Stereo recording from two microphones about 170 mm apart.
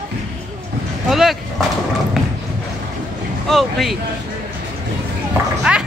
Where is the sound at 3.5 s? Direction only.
Centre (ahead or behind).